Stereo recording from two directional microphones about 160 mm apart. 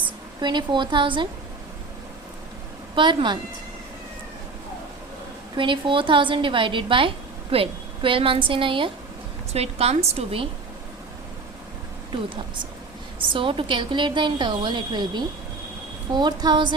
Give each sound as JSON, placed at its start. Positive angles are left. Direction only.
{"t": 0.4, "sound": "a woman's voice", "side_deg": -30}
{"t": 2.9, "sound": "a woman's voice", "side_deg": -30}
{"t": 5.5, "sound": "a woman's voice", "side_deg": -30}
{"t": 13.1, "sound": "a woman's voice", "side_deg": -30}